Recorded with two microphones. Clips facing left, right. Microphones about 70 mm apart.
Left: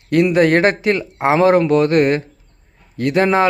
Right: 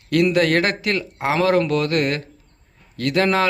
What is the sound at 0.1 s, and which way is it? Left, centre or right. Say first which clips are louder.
Speech: left 4 dB; left.